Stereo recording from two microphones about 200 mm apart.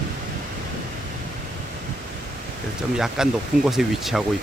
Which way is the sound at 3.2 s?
5° right (ahead or behind).